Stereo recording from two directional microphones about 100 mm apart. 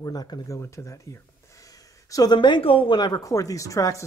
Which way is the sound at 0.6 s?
30° left (ahead or behind).